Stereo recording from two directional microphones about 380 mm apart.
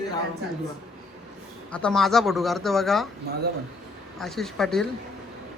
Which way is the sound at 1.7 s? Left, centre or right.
Centre.